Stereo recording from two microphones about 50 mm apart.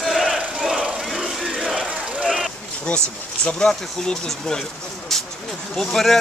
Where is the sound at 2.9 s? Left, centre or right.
Centre.